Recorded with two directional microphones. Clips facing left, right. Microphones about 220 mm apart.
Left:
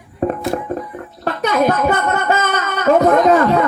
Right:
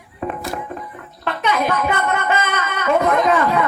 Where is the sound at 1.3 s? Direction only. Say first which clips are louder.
Left 4 dB; 40° left (ahead or behind).